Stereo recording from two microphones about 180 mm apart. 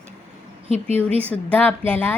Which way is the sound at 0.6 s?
35° right (ahead or behind).